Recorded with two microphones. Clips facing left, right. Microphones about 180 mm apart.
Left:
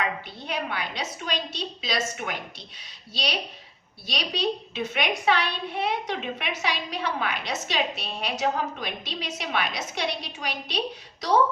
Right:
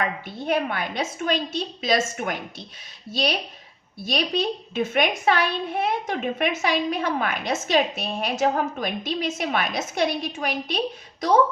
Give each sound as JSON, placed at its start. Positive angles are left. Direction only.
{"t": 0.3, "sound": "a woman's voice", "side_deg": -50}